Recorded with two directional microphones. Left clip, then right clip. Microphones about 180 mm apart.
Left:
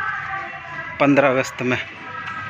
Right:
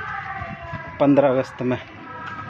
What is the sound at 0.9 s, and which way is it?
Speech, 10° right (ahead or behind).